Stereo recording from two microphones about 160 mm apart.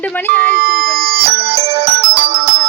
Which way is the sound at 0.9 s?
35° right (ahead or behind).